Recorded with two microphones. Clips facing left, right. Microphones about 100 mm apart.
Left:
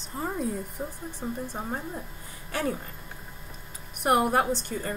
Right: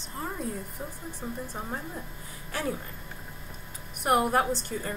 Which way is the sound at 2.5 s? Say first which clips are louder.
Left 2 dB; centre (ahead or behind).